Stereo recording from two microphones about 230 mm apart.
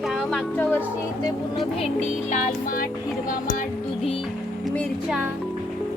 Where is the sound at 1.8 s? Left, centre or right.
Left.